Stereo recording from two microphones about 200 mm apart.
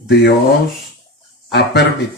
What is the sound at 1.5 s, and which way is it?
Speech, 55° left (ahead or behind).